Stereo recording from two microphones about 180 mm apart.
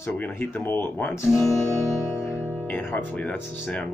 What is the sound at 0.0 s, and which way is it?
Speech, 10° left (ahead or behind).